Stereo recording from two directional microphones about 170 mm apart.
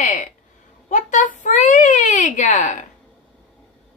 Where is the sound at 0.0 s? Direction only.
45° left (ahead or behind).